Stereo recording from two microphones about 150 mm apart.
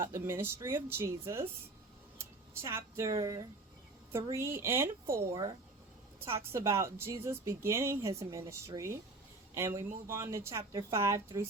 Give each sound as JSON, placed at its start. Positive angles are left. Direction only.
{"t": 0.0, "sound": "a woman's voice", "side_deg": -15}